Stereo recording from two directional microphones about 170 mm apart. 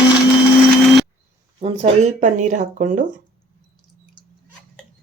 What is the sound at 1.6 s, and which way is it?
Speech, 40° right (ahead or behind).